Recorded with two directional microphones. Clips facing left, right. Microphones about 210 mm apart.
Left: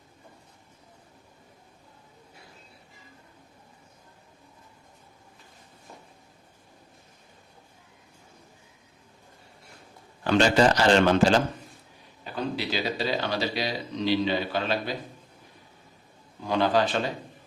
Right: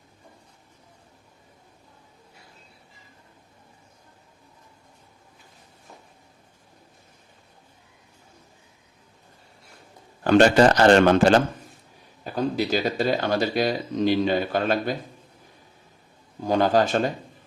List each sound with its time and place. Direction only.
10.2 s a man's voice: 50° right (ahead or behind)
12.2 s speech: 45° right (ahead or behind)
16.4 s speech: 45° right (ahead or behind)